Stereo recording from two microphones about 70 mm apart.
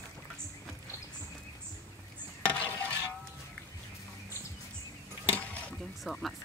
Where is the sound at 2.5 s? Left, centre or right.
Centre.